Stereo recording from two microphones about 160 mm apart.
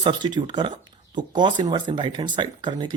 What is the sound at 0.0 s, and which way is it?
Speech, 30° right (ahead or behind).